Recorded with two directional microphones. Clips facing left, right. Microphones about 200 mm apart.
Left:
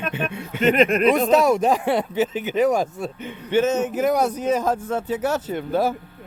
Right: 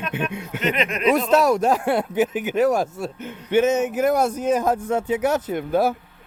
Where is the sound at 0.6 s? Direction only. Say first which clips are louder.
Left 6 dB; 50° left (ahead or behind).